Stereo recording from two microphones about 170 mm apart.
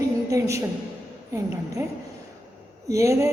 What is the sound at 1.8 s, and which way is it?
A woman's voice, 15° right (ahead or behind).